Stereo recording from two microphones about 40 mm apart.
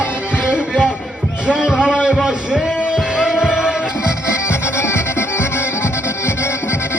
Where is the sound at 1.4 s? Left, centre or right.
Centre.